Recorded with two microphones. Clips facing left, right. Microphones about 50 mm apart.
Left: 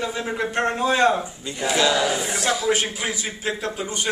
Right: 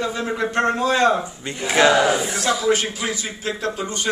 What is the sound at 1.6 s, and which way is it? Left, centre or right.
Speech, right.